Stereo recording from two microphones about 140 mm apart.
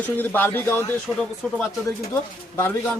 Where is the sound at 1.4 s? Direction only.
5° left (ahead or behind).